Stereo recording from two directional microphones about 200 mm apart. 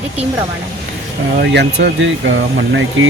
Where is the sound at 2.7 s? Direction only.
70° right (ahead or behind).